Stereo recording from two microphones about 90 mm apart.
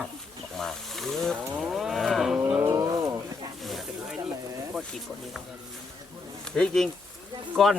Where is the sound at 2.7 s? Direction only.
40° right (ahead or behind).